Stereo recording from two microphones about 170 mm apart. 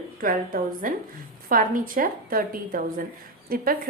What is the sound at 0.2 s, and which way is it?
A woman's voice, 55° right (ahead or behind).